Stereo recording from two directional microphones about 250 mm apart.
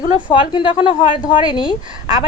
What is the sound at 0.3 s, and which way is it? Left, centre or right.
Speech, centre.